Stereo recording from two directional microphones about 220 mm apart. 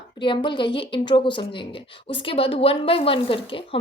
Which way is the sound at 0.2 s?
20° left (ahead or behind).